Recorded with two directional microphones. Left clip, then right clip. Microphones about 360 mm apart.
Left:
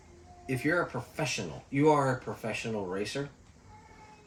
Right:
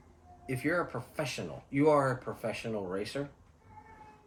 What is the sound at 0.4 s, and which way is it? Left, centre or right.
Speech, centre.